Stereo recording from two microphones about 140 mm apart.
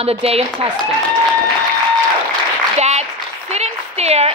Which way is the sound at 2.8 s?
50° right (ahead or behind).